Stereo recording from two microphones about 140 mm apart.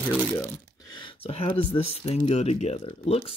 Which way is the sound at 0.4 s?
30° left (ahead or behind).